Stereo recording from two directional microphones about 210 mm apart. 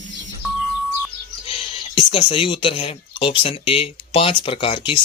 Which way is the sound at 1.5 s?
25° left (ahead or behind).